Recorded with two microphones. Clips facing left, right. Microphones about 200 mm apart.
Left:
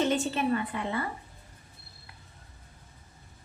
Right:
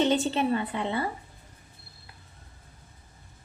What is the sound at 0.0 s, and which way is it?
A woman's voice, 25° right (ahead or behind).